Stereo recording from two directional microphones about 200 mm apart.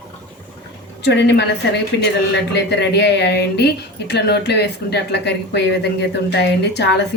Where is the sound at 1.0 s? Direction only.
60° left (ahead or behind).